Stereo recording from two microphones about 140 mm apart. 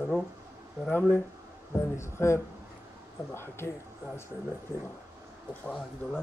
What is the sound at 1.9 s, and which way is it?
Speech, 20° left (ahead or behind).